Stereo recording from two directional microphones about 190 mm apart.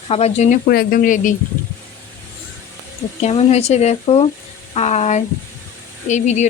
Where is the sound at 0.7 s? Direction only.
50° left (ahead or behind).